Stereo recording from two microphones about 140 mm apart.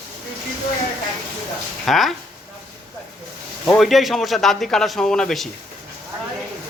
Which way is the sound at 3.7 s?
Centre (ahead or behind).